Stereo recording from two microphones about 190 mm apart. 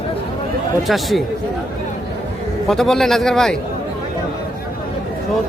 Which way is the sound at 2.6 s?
Centre (ahead or behind).